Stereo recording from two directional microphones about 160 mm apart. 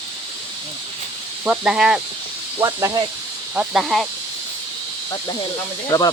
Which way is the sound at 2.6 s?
20° right (ahead or behind).